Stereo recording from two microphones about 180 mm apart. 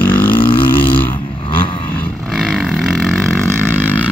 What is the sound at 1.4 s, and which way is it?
Vehicle, 30° left (ahead or behind).